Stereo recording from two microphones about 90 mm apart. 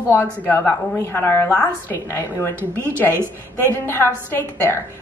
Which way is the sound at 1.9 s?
30° left (ahead or behind).